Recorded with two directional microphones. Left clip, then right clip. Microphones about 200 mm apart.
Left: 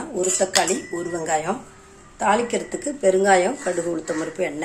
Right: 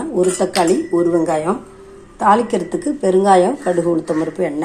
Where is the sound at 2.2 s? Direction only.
10° right (ahead or behind).